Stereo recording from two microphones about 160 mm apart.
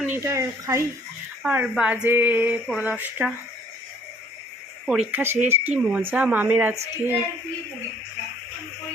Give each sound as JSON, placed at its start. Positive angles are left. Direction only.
{"t": 0.0, "sound": "speech", "side_deg": -15}
{"t": 1.4, "sound": "speech", "side_deg": -5}
{"t": 4.9, "sound": "speech", "side_deg": -10}